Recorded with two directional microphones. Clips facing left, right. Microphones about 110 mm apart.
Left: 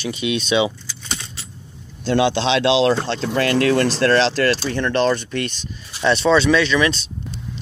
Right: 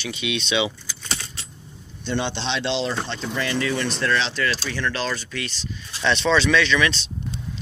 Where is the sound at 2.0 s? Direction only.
90° left.